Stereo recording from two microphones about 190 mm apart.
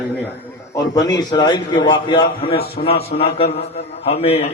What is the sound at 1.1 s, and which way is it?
A man's voice, 20° left (ahead or behind).